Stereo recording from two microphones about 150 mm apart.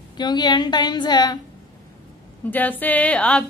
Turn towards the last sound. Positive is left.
turn(degrees=10)  # may be behind; listen again after turning